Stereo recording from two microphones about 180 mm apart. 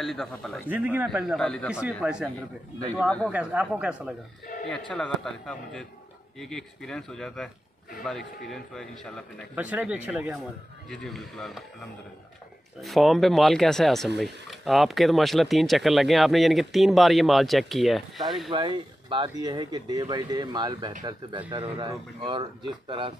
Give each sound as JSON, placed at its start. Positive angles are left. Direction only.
{"t": 0.0, "sound": "speech", "side_deg": 0}
{"t": 0.7, "sound": "speech", "side_deg": -10}
{"t": 3.3, "sound": "speech", "side_deg": -5}
{"t": 4.6, "sound": "speech", "side_deg": 5}
{"t": 9.6, "sound": "speech", "side_deg": -10}
{"t": 12.8, "sound": "speech", "side_deg": 0}
{"t": 18.5, "sound": "speech", "side_deg": -25}